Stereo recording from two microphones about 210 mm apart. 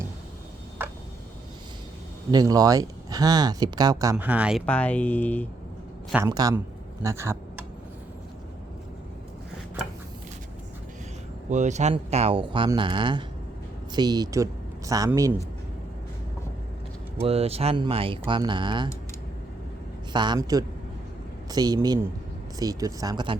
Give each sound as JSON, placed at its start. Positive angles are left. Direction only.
{"t": 2.3, "sound": "speech", "side_deg": -20}
{"t": 4.6, "sound": "speech", "side_deg": 5}
{"t": 6.2, "sound": "speech", "side_deg": -20}
{"t": 11.4, "sound": "speech", "side_deg": -35}
{"t": 17.2, "sound": "speech", "side_deg": -30}
{"t": 20.1, "sound": "speech", "side_deg": -20}